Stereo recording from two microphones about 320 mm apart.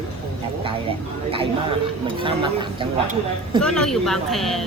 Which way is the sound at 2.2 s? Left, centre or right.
Centre.